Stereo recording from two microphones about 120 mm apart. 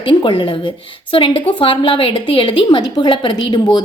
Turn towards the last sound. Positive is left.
turn(degrees=35)  # may be behind; listen again after turning